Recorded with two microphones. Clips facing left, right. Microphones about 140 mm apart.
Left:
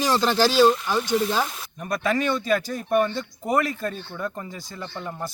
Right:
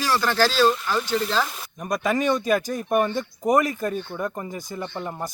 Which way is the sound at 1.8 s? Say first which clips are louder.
Right 1 dB; 15° right (ahead or behind).